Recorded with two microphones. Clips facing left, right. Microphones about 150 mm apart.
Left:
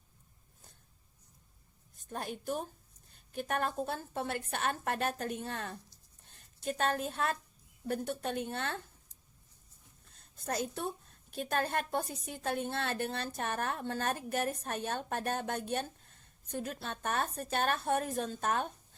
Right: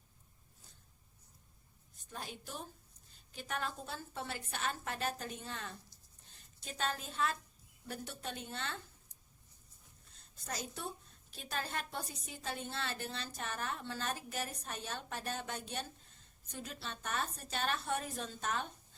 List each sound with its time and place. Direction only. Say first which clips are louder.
2.0 s a woman's voice: left 7 dB; 55° left (ahead or behind)
10.1 s a woman's voice: left 8 dB; 55° left (ahead or behind)